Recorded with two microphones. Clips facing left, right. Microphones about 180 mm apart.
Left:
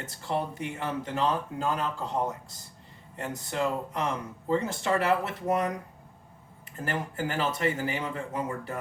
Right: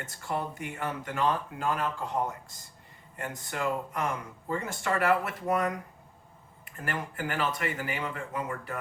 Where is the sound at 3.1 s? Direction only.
30° left (ahead or behind).